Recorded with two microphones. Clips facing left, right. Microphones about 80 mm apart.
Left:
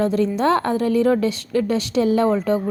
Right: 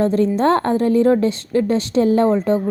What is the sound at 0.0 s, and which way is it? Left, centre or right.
A woman's voice, right.